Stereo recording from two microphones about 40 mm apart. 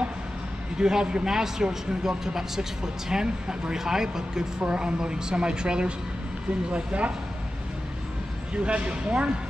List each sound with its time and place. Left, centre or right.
0.7 s a man's voice: centre
8.6 s a woman's voice: right